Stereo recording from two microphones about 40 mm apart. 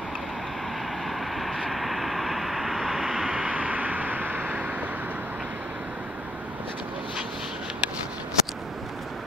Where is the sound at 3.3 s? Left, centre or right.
Right.